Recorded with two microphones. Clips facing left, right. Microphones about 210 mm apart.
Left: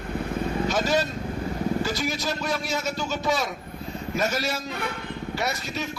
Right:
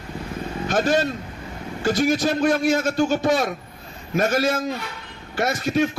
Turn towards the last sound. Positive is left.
turn(degrees=-50)  # may be behind; listen again after turning